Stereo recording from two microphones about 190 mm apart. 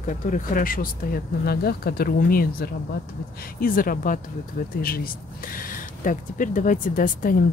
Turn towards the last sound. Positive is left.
turn(degrees=45)  # may be behind; listen again after turning